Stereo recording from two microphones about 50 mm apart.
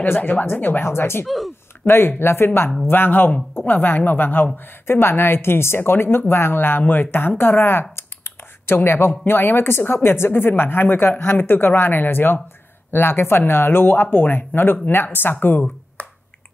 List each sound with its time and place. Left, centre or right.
0.0 s speech: left
0.8 s speech: left
1.2 s speech: centre
1.9 s speech: left
2.9 s speech: left
4.8 s speech: left
7.9 s computer keyboard: left
9.2 s speech: left
16.0 s finger snapping: left